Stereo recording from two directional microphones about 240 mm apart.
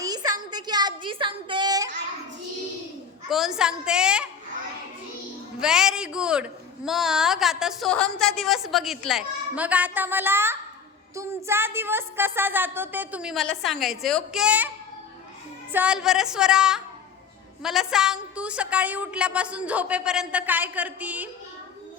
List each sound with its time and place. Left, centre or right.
0.0 s a sound: centre
3.2 s a woman's voice: centre
5.5 s a woman's voice: centre
15.7 s a woman's voice: centre